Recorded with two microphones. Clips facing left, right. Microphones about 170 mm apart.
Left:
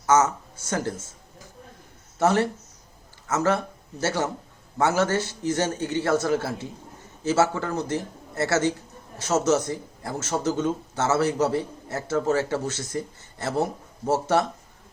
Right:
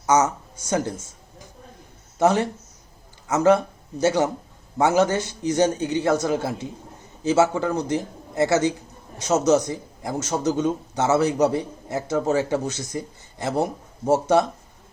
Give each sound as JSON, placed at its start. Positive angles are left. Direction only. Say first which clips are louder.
{"t": 0.0, "sound": "speech", "louder": "right 1 dB", "side_deg": -15}
{"t": 2.1, "sound": "speech", "louder": "right 2 dB", "side_deg": -15}